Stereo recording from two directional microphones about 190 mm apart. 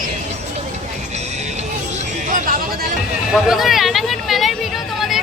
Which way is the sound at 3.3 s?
Centre (ahead or behind).